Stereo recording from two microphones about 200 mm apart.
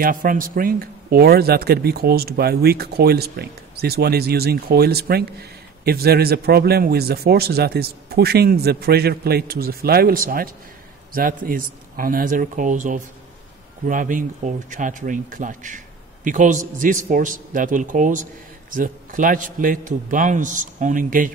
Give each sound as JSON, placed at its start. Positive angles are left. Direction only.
{"t": 0.0, "sound": "a man's voice", "side_deg": -45}